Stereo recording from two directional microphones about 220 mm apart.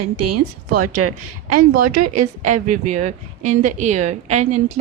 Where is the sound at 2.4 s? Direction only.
35° right (ahead or behind).